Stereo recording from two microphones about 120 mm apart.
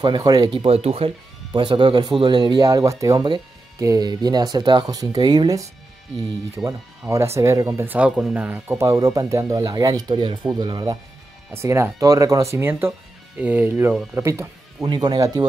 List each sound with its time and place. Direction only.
0.0 s speech: 35° right (ahead or behind); by 1.1 s 55° right (ahead or behind)
1.5 s speech: 40° right (ahead or behind)
7.9 s speech: 5° right (ahead or behind); by 11.0 s 35° right (ahead or behind)
11.5 s speech: 20° right (ahead or behind)
14.9 s speech: 35° right (ahead or behind)